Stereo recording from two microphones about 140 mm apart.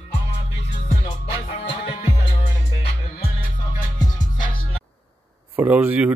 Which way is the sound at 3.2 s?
90° left.